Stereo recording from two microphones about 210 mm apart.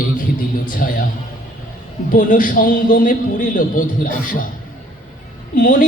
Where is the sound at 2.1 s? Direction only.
40° left (ahead or behind).